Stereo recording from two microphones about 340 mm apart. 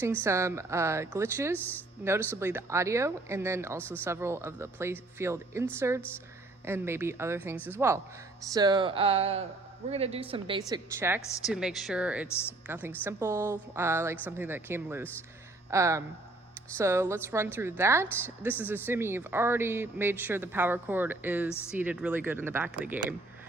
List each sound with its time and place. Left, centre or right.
0.0 s speech: centre
3.8 s a woman's voice: centre
4.0 s speech: centre
6.7 s a woman's voice: centre